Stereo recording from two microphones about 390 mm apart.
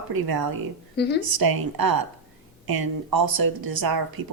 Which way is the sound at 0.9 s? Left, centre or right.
Left.